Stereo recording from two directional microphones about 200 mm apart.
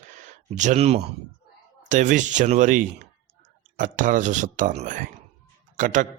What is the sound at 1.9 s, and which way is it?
Speech, 40° right (ahead or behind).